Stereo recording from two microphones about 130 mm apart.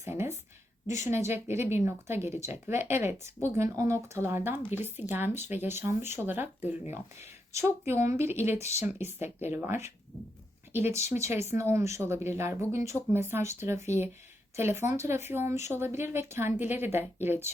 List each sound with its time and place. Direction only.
0.0 s speech: 20° right (ahead or behind)